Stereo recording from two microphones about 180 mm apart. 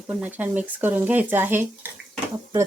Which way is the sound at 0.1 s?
10° right (ahead or behind).